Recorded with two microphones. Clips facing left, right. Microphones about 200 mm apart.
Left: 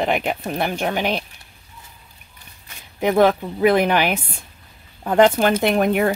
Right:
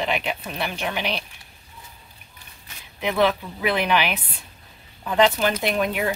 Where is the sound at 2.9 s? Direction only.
45° left (ahead or behind).